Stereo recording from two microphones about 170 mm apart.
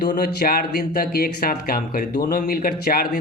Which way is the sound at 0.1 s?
60° left (ahead or behind).